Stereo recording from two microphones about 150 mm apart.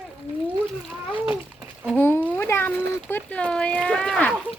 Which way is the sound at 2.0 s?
15° left (ahead or behind).